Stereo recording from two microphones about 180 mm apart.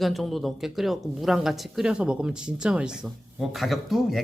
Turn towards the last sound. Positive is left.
turn(degrees=0)  # may be behind; listen again after turning